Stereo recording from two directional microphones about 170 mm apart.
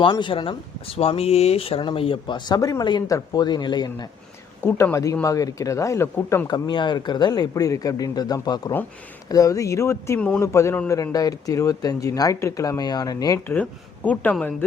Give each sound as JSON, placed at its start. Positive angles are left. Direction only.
{"t": 0.0, "sound": "a man's voice", "side_deg": 30}
{"t": 6.7, "sound": "a man's voice", "side_deg": 30}